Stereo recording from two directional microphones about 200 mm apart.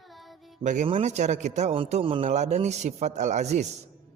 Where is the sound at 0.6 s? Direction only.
35° right (ahead or behind).